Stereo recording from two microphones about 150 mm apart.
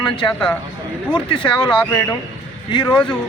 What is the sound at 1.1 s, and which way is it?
Speech, 35° left (ahead or behind).